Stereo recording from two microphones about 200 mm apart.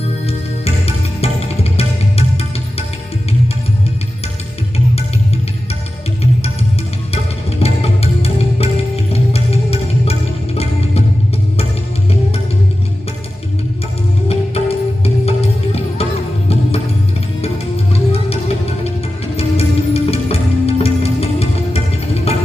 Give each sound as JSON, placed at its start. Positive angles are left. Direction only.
{"t": 1.2, "sound": "music", "side_deg": 30}
{"t": 7.6, "sound": "music", "side_deg": 30}
{"t": 14.3, "sound": "music", "side_deg": 30}
{"t": 17.9, "sound": "music", "side_deg": 30}